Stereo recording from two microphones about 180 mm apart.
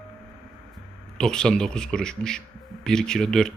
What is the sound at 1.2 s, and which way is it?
Speech, 5° left (ahead or behind).